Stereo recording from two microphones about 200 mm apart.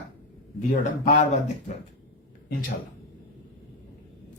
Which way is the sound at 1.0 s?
35° left (ahead or behind).